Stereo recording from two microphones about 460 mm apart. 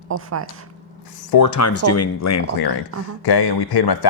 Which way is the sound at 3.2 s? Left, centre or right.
Left.